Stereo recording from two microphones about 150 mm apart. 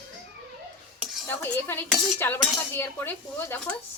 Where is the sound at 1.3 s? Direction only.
15° left (ahead or behind).